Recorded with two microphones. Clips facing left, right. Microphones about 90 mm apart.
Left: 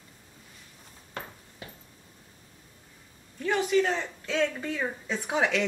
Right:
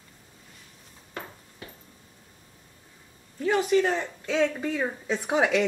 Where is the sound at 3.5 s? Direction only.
5° right (ahead or behind).